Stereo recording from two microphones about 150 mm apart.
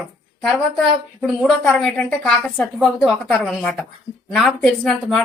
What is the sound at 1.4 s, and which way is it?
A woman's voice, centre (ahead or behind).